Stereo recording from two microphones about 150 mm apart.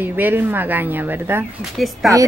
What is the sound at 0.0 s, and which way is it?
Speech, 15° right (ahead or behind).